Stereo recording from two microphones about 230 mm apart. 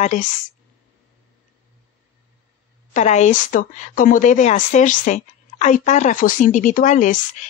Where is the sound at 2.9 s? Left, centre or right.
Left.